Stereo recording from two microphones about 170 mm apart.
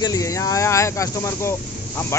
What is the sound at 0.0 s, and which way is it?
Speech, 20° left (ahead or behind).